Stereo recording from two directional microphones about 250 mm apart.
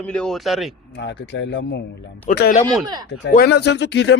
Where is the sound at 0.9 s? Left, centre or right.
Left.